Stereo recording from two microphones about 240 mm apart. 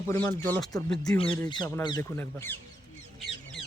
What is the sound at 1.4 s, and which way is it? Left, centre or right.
Speech, centre.